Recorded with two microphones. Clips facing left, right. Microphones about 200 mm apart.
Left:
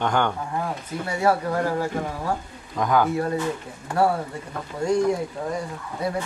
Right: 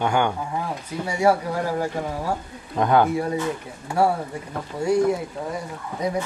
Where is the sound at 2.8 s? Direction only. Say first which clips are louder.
Right 3 dB; 30° right (ahead or behind).